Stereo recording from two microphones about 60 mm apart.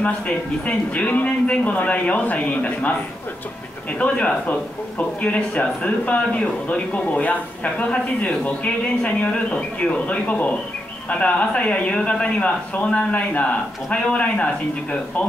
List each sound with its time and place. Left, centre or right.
0.7 s speech: left
4.0 s speech: left